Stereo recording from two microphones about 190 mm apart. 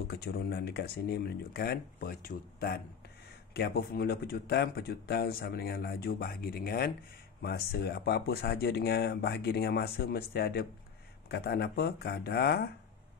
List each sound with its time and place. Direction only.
0.1 s speech: 55° left (ahead or behind)